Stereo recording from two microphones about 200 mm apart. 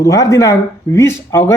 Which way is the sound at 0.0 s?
15° left (ahead or behind).